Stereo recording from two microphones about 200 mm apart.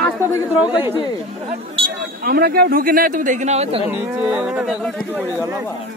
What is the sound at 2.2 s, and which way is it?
A man's voice, 50° right (ahead or behind).